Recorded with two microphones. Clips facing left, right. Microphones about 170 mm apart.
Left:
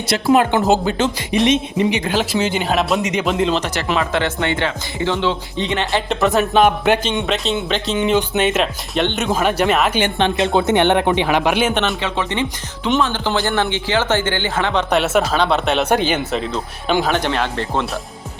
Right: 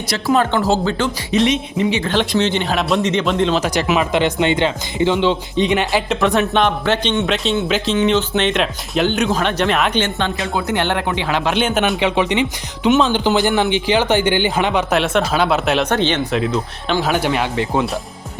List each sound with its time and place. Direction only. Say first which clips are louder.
0.3 s speech: even; 15° left (ahead or behind)
3.6 s speech: right 3 dB; 15° right (ahead or behind)
5.9 s speech: even; centre (ahead or behind)
7.3 s speech: right 2 dB; centre (ahead or behind)
10.0 s speech: left 3 dB; 20° left (ahead or behind)
11.7 s speech: right 2 dB; 5° right (ahead or behind)
11.9 s speech: right 5 dB; 15° right (ahead or behind)
15.9 s speech: even; 10° left (ahead or behind)
17.0 s speech: right 3 dB; 5° right (ahead or behind)